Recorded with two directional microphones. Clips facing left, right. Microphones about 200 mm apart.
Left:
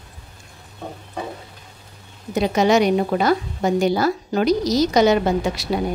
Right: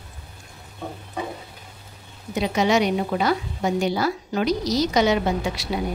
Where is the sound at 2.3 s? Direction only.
45° left (ahead or behind).